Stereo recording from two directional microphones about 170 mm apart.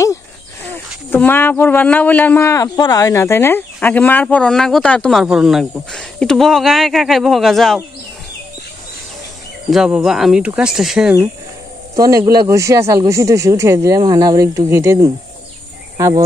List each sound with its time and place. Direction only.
1.1 s speech: 10° left (ahead or behind)
9.7 s speech: 5° right (ahead or behind)
11.9 s speech: 20° right (ahead or behind)